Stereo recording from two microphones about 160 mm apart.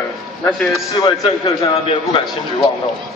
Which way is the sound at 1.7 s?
35° left (ahead or behind).